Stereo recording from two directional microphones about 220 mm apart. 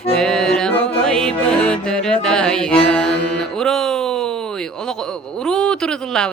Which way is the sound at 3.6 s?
Centre (ahead or behind).